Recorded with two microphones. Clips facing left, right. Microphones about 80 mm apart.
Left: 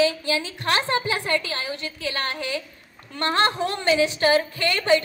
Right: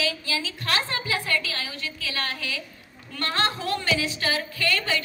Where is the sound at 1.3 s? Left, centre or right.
Left.